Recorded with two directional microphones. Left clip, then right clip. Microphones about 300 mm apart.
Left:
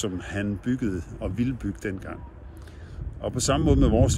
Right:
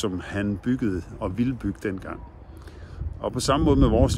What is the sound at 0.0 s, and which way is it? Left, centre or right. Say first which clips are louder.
Speech: right 2 dB; centre.